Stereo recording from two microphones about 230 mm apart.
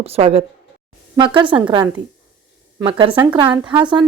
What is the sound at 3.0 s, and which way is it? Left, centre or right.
A woman's voice, right.